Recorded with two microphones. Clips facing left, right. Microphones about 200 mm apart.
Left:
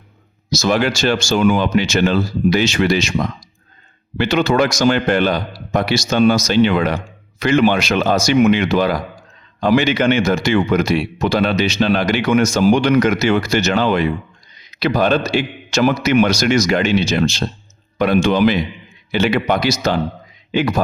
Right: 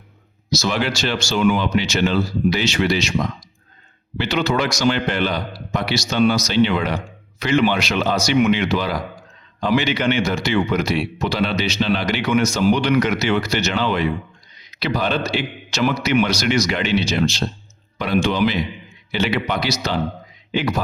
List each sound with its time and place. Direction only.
0.5 s speech: 45° left (ahead or behind)
4.2 s a man's voice: 50° left (ahead or behind)